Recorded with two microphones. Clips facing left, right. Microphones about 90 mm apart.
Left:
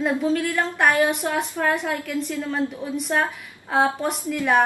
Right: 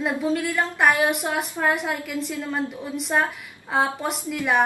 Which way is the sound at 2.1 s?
Centre (ahead or behind).